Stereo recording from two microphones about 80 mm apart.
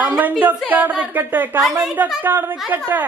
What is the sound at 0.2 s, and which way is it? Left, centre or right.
A woman's voice, right.